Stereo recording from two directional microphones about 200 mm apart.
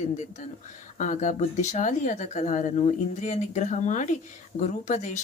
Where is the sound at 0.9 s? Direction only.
35° left (ahead or behind).